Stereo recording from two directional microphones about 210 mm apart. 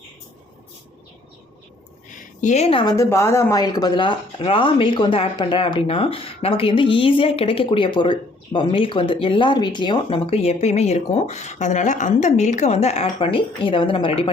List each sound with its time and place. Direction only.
2.1 s a woman's voice: 35° left (ahead or behind)